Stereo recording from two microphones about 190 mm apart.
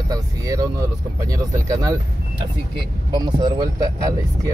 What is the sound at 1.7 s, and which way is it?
Speech, 20° right (ahead or behind).